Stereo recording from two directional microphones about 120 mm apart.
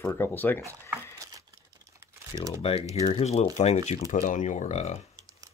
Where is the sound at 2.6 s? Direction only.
55° left (ahead or behind); by 5.0 s 70° left (ahead or behind).